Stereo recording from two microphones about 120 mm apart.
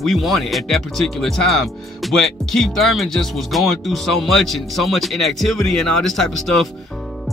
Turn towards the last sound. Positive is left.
turn(degrees=5)  # may be behind; listen again after turning